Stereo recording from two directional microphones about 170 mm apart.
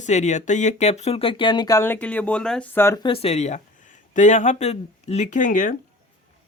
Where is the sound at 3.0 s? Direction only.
35° left (ahead or behind); by 5.7 s 50° left (ahead or behind).